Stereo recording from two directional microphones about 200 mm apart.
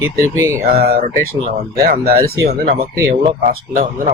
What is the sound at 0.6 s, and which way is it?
Speech, 50° right (ahead or behind).